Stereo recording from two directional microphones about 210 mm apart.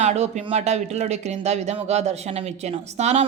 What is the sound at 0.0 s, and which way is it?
Speech, 30° right (ahead or behind).